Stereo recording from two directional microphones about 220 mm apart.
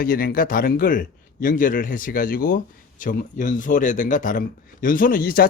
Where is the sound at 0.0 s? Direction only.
40° left (ahead or behind).